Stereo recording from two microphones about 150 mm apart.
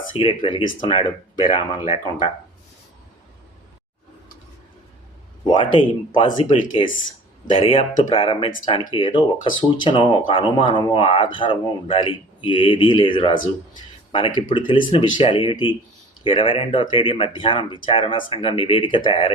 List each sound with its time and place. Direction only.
0.2 s speech: 35° left (ahead or behind)
5.5 s speech: 30° left (ahead or behind)
7.5 s speech: 35° left (ahead or behind)